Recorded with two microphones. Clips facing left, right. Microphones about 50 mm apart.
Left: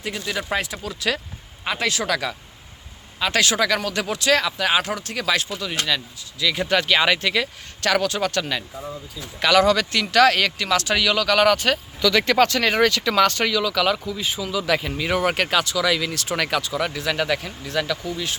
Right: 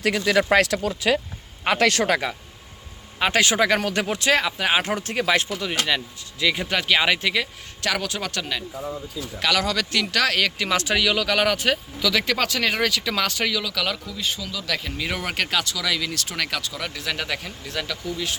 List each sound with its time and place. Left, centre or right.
0.0 s speech: right
0.5 s speech: right
1.6 s speech: right
3.3 s speech: right
4.9 s speech: right
6.6 s speech: centre
10.6 s speech: centre